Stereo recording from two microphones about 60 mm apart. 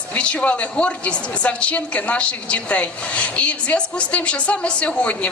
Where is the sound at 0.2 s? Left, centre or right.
Left.